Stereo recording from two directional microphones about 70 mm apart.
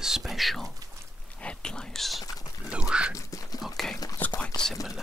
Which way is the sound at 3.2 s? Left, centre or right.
Left.